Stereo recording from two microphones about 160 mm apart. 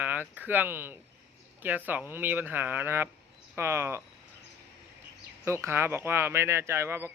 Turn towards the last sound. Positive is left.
turn(degrees=-15)  # may be behind; listen again after turning